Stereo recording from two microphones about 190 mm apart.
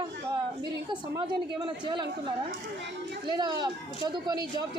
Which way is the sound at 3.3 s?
20° right (ahead or behind).